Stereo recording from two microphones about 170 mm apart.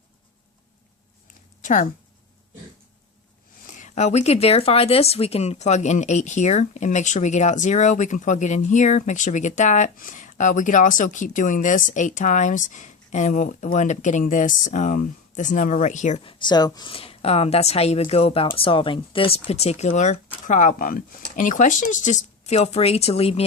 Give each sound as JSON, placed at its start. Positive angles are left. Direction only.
{"t": 1.3, "sound": "a sound", "side_deg": 50}
{"t": 3.7, "sound": "speech", "side_deg": 45}
{"t": 16.5, "sound": "a woman's voice", "side_deg": 25}